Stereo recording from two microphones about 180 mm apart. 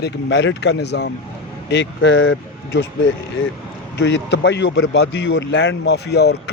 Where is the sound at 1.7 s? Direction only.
90° left.